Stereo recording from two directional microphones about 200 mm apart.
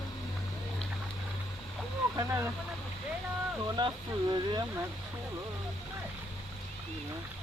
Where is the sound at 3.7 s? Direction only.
20° right (ahead or behind).